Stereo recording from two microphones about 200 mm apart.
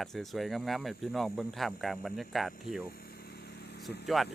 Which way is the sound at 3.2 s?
55° left (ahead or behind).